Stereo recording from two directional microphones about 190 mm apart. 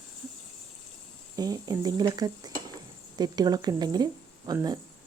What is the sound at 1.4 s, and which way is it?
Speech, 20° right (ahead or behind).